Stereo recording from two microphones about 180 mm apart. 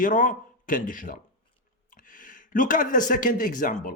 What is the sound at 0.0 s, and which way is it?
A man's voice, 45° left (ahead or behind).